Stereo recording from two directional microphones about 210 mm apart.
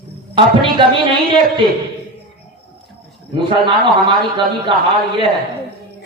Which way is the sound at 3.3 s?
25° right (ahead or behind).